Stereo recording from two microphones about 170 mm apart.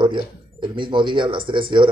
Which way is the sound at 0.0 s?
30° right (ahead or behind).